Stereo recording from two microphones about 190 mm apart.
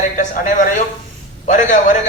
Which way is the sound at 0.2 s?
40° left (ahead or behind).